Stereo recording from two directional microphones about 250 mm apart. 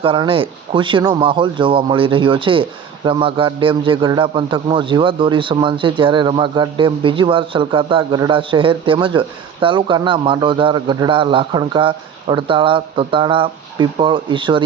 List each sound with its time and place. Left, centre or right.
0.0 s speech: right